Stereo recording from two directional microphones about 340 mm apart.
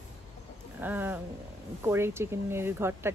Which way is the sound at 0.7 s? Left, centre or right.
Centre.